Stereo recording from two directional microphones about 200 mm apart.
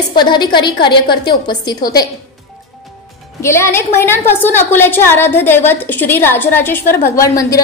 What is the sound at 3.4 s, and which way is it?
A woman's voice, 15° left (ahead or behind).